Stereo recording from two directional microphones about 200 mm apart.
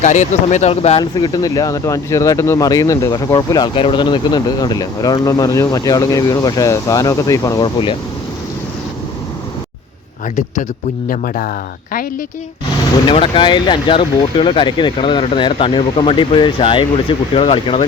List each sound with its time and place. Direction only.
0.0 s speech: 35° left (ahead or behind)
11.1 s speech: 45° left (ahead or behind)
13.1 s speech: 25° left (ahead or behind)